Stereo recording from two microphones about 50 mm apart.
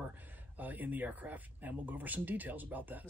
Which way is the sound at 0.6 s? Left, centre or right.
Right.